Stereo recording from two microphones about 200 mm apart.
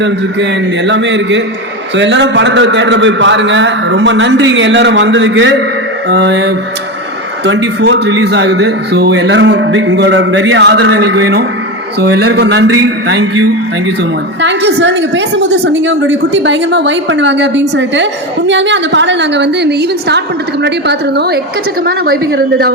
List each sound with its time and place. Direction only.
0.9 s a woman's voice: 65° right (ahead or behind)